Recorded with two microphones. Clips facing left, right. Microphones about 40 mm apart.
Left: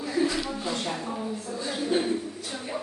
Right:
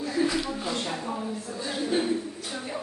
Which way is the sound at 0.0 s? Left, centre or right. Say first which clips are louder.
Even; centre.